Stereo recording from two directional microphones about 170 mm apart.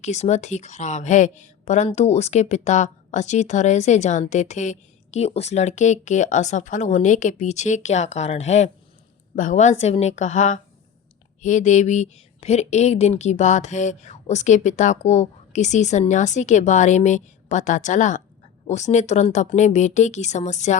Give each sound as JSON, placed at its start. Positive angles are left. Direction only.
{"t": 0.0, "sound": "a woman's voice", "side_deg": 40}